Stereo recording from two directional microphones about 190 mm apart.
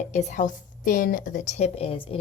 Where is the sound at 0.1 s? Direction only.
40° left (ahead or behind).